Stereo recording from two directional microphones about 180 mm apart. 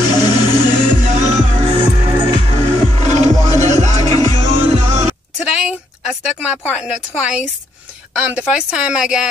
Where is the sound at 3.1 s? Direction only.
40° right (ahead or behind).